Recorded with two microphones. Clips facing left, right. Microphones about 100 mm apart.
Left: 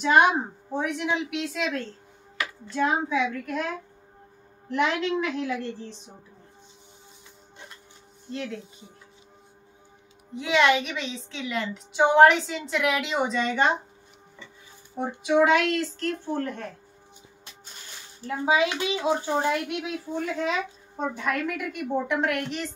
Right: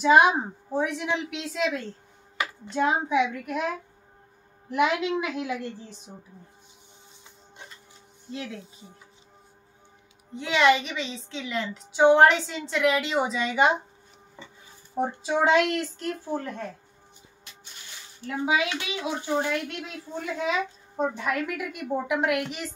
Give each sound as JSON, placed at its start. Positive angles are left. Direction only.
{"t": 0.0, "sound": "a woman's voice", "side_deg": 0}
{"t": 2.3, "sound": "a child's voice", "side_deg": -20}
{"t": 8.3, "sound": "a woman's voice", "side_deg": -5}
{"t": 10.3, "sound": "a woman's voice", "side_deg": 0}
{"t": 15.2, "sound": "speech", "side_deg": -30}
{"t": 18.2, "sound": "a child's voice", "side_deg": 30}
{"t": 19.7, "sound": "a woman's voice", "side_deg": 10}
{"t": 20.3, "sound": "a woman's voice", "side_deg": -5}